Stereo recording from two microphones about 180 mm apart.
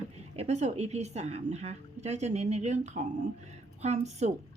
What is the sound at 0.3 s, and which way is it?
Speech, 40° right (ahead or behind).